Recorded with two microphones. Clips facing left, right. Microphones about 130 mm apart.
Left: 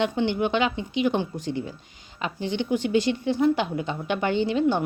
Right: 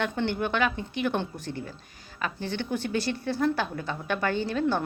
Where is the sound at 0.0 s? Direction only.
15° left (ahead or behind).